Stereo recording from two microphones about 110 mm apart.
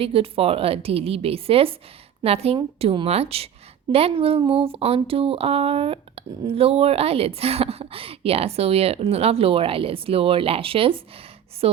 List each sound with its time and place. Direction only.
0.0 s a woman's voice: 60° right (ahead or behind)